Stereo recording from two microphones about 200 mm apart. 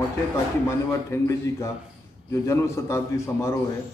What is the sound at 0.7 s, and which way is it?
Speech, 15° left (ahead or behind).